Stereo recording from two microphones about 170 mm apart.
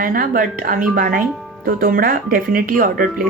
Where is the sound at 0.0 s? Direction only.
55° right (ahead or behind).